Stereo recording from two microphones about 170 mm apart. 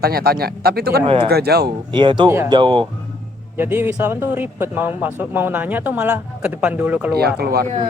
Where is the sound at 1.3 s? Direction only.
70° right (ahead or behind).